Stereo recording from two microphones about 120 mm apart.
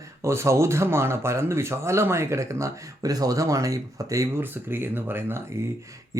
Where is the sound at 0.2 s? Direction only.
25° right (ahead or behind).